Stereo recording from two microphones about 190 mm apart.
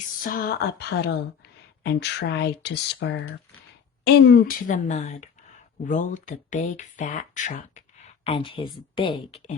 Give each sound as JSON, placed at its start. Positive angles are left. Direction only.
{"t": 0.2, "sound": "speech", "side_deg": 50}